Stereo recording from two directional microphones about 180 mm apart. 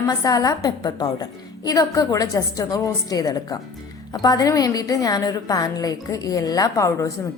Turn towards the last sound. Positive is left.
turn(degrees=15)  # may be behind; listen again after turning